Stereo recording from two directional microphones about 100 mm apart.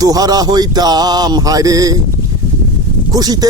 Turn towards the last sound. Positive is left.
turn(degrees=-40)  # may be behind; listen again after turning